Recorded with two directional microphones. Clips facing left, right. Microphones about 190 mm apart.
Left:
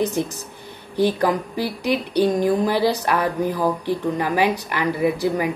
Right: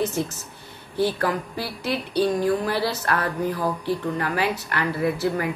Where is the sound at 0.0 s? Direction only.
15° left (ahead or behind).